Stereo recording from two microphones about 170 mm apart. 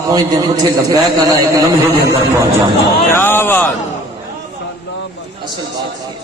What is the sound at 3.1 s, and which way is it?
Speech, 15° left (ahead or behind).